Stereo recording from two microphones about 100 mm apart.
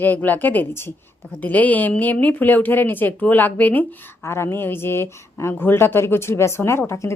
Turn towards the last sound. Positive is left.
turn(degrees=25)  # may be behind; listen again after turning